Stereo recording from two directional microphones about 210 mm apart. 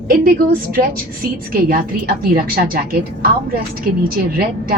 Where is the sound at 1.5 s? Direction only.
45° right (ahead or behind).